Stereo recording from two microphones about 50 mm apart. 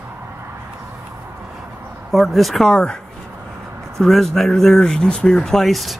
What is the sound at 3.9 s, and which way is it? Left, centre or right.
Speech, centre.